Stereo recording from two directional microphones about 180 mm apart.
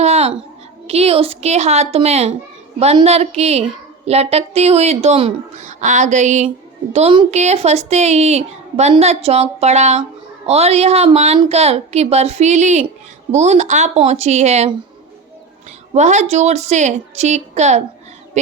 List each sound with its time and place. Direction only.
0.0 s a sound: 35° right (ahead or behind)
0.9 s a woman's voice: 35° right (ahead or behind)
16.0 s a woman's voice: 40° right (ahead or behind)